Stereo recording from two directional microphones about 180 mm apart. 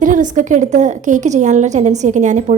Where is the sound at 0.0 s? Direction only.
45° right (ahead or behind).